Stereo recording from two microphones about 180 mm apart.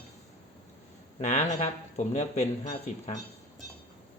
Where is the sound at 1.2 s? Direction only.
40° left (ahead or behind).